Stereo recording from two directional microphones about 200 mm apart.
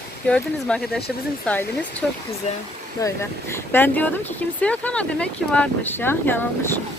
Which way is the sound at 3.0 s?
15° left (ahead or behind).